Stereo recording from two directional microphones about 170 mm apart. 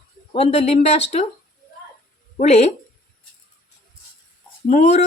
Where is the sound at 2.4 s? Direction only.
40° left (ahead or behind).